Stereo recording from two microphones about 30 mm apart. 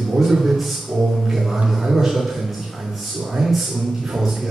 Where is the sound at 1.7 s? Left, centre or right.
Centre.